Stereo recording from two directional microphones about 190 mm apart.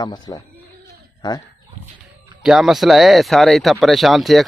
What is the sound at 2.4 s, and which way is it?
Speech, centre (ahead or behind).